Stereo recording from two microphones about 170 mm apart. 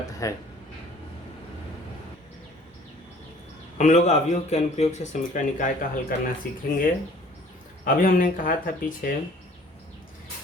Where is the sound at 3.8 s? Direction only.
40° left (ahead or behind).